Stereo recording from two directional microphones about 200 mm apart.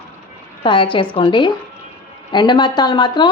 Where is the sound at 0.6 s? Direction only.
25° left (ahead or behind).